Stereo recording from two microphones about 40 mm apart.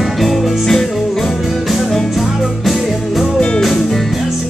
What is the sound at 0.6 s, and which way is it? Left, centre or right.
Music, centre.